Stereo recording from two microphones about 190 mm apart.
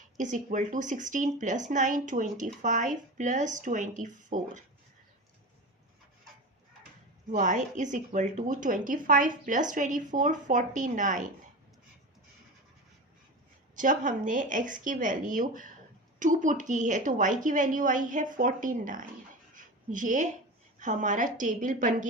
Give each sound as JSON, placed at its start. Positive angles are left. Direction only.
{"t": 0.2, "sound": "speech", "side_deg": -40}
{"t": 7.3, "sound": "a woman's voice", "side_deg": -40}
{"t": 13.7, "sound": "a woman's voice", "side_deg": -45}